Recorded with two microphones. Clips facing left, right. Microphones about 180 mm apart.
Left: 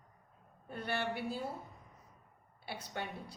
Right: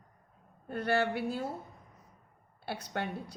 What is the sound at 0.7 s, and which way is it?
Speech, 80° right.